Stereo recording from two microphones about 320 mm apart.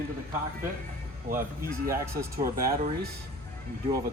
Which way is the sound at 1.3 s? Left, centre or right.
Right.